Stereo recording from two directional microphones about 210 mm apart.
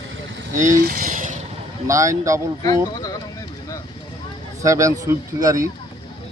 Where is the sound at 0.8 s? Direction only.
40° right (ahead or behind).